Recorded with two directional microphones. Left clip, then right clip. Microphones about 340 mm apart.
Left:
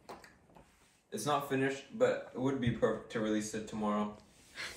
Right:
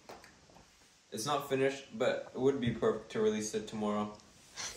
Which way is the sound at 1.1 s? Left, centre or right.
Centre.